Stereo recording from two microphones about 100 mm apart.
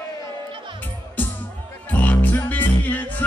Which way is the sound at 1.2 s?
15° left (ahead or behind).